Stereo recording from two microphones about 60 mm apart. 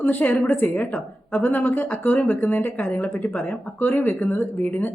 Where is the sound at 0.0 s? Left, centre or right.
Left.